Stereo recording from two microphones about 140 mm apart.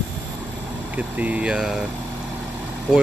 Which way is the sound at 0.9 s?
10° right (ahead or behind).